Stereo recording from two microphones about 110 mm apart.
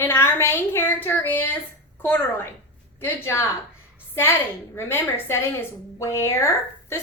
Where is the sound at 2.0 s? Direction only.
20° left (ahead or behind).